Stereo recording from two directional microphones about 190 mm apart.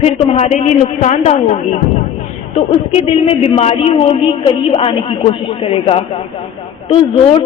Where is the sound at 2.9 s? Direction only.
30° left (ahead or behind).